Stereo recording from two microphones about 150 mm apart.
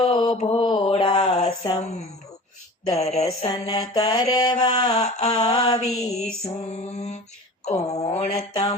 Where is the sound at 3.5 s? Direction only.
25° left (ahead or behind).